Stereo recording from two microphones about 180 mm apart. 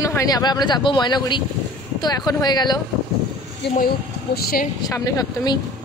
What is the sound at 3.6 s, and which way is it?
A woman's voice, 60° left (ahead or behind).